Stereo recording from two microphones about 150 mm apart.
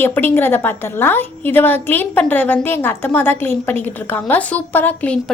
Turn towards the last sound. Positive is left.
turn(degrees=10)  # may be behind; listen again after turning